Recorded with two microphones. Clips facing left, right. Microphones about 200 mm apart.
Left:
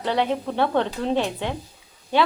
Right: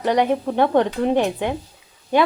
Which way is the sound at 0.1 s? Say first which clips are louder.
Right 4 dB; 15° right (ahead or behind).